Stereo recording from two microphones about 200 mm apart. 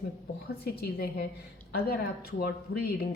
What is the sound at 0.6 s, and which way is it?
Speech, 50° left (ahead or behind).